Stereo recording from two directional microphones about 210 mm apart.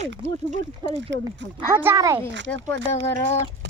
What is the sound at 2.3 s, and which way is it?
Speech, 60° right (ahead or behind).